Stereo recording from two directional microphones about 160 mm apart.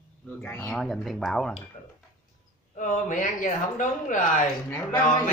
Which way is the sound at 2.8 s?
55° left (ahead or behind).